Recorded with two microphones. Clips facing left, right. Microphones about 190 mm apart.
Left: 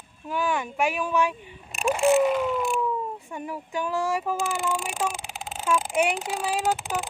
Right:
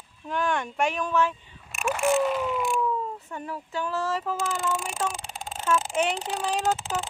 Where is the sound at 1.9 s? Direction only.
25° left (ahead or behind).